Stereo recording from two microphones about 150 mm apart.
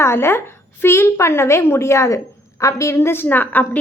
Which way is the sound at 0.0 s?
15° left (ahead or behind).